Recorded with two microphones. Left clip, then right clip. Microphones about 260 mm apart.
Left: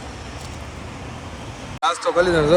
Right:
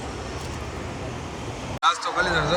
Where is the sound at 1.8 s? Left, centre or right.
Centre.